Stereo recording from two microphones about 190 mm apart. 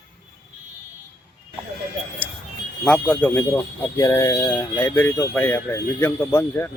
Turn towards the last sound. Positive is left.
turn(degrees=15)  # may be behind; listen again after turning